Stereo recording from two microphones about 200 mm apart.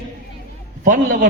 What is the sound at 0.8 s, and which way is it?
Speech, 40° right (ahead or behind).